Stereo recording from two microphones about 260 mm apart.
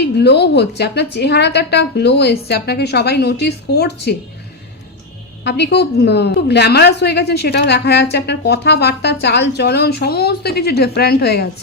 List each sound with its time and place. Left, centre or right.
0.2 s a woman's voice: left
5.4 s a woman's voice: left